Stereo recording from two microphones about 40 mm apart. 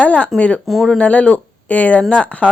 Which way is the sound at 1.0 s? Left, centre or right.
Left.